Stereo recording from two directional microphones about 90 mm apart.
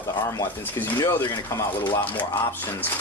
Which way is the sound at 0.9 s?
50° left (ahead or behind).